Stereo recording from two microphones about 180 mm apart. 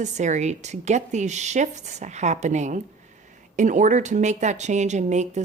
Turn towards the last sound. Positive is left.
turn(degrees=-40)  # may be behind; listen again after turning